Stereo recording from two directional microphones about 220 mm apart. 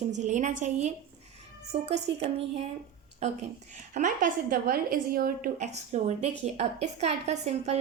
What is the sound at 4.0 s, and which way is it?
A woman's voice, 35° right (ahead or behind).